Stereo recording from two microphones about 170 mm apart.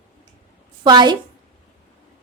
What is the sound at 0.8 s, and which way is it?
Speech, 25° right (ahead or behind).